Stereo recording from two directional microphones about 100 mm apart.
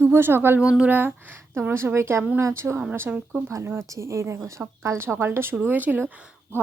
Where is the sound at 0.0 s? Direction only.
25° right (ahead or behind).